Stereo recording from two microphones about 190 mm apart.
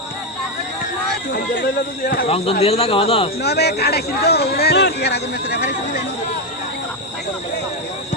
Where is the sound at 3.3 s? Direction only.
60° left (ahead or behind).